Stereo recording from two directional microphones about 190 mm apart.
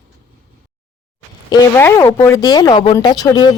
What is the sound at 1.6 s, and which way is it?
Speech, 15° left (ahead or behind).